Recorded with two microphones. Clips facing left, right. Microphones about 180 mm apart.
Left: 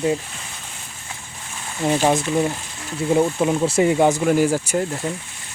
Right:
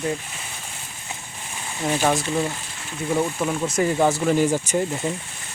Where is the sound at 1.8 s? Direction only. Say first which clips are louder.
Left 3 dB; 20° left (ahead or behind).